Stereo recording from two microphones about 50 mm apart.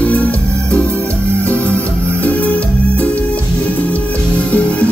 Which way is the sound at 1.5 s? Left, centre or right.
Left.